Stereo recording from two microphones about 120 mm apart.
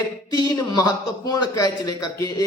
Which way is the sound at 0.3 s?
30° left (ahead or behind).